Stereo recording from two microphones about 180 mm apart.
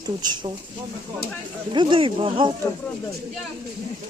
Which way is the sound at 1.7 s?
25° right (ahead or behind).